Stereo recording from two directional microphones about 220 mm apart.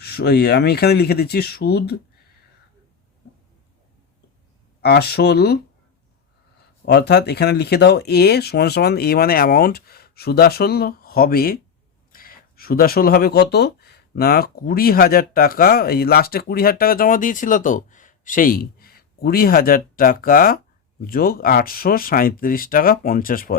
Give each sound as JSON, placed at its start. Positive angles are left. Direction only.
{"t": 0.0, "sound": "speech", "side_deg": 45}
{"t": 4.8, "sound": "speech", "side_deg": 45}
{"t": 6.8, "sound": "speech", "side_deg": 50}